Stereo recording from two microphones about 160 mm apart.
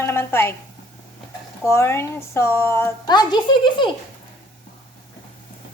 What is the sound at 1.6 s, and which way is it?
A woman's voice, 15° left (ahead or behind).